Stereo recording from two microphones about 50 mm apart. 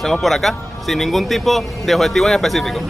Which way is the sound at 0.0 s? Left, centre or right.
Centre.